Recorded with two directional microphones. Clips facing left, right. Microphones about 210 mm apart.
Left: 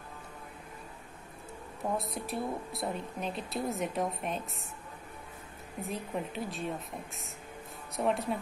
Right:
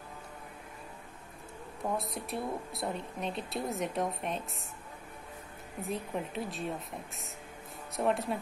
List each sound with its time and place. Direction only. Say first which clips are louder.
2.0 s speech: left 1 dB; centre (ahead or behind)
5.8 s speech: even; centre (ahead or behind)
7.9 s speech: even; centre (ahead or behind)